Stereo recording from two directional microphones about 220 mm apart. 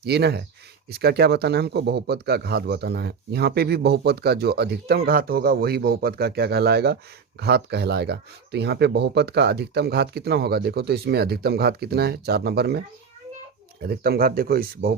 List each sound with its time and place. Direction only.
0.0 s speech: 50° right (ahead or behind)
13.8 s speech: 45° right (ahead or behind)